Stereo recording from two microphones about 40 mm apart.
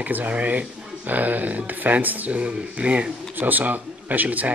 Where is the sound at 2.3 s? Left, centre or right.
Right.